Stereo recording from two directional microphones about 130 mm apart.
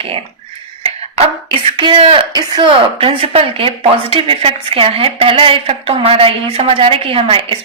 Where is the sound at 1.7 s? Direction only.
40° right (ahead or behind).